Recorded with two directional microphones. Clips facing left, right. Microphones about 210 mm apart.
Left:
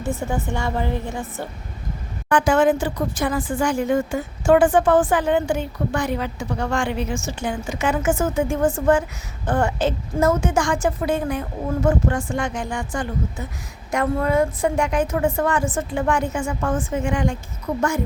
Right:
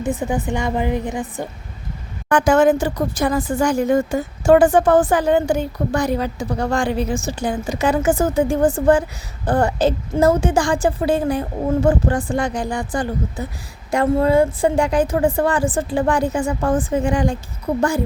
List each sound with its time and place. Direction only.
0.0 s a woman's voice: 15° right (ahead or behind)
2.3 s speech: 45° right (ahead or behind)